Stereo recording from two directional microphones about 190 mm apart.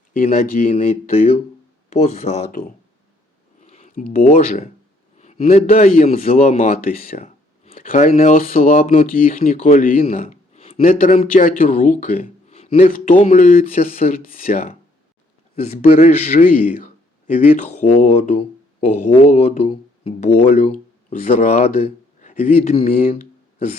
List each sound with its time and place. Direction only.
0.3 s speech: 40° left (ahead or behind)
1.0 s a man's voice: 30° left (ahead or behind)
2.5 s a man's voice: 45° left (ahead or behind)
7.2 s a sound: 35° left (ahead or behind)
7.8 s speech: 40° left (ahead or behind)
10.2 s a sound: 30° left (ahead or behind)
10.8 s speech: 40° left (ahead or behind)
15.5 s a man's voice: 35° left (ahead or behind)